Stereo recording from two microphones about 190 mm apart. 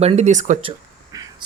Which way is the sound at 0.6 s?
20° right (ahead or behind).